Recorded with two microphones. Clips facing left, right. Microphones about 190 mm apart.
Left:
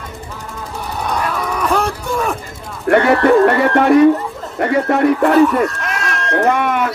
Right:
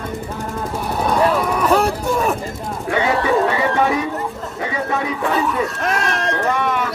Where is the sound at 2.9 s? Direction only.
60° left (ahead or behind).